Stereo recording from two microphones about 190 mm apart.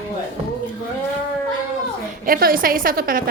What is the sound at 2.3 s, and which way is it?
Speech, 50° right (ahead or behind).